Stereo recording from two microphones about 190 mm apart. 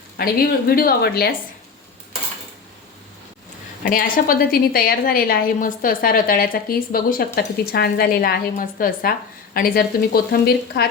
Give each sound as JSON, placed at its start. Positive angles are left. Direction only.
{"t": 0.2, "sound": "a woman's voice", "side_deg": 50}
{"t": 3.8, "sound": "a woman's voice", "side_deg": 50}